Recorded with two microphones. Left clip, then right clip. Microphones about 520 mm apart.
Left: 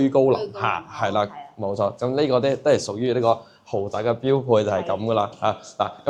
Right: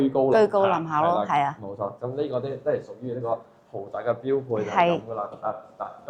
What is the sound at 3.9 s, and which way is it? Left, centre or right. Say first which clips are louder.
Speech: left 3 dB; left.